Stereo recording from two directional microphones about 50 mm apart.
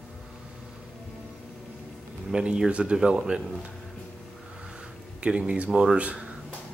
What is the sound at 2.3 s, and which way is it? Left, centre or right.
Speech, centre.